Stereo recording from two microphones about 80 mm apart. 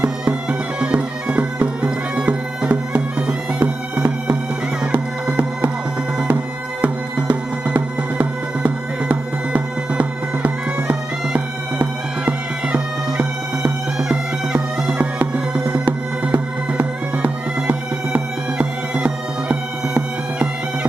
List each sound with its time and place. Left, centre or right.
0.0 s bagpipes: centre
5.3 s music: centre